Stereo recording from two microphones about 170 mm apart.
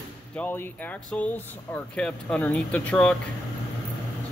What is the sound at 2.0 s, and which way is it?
Speech, 5° left (ahead or behind).